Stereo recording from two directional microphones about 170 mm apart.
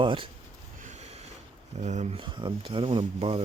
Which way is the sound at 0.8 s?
45° right (ahead or behind).